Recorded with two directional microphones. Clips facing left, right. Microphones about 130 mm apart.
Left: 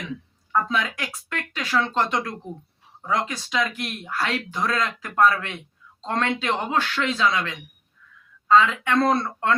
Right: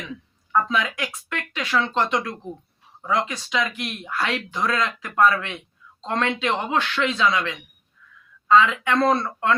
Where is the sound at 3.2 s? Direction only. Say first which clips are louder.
Even; 40° left (ahead or behind).